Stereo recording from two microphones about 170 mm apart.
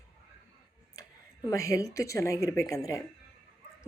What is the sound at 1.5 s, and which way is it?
A woman's voice, 20° left (ahead or behind).